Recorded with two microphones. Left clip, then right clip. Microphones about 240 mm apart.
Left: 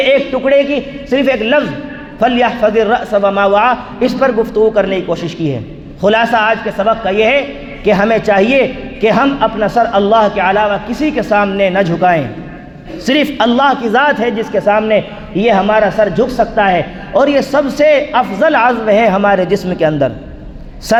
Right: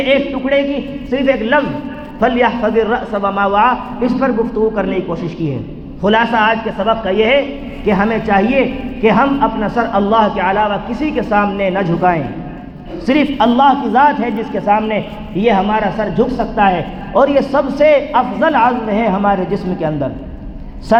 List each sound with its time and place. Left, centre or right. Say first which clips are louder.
0.0 s a man's voice: left 4 dB; left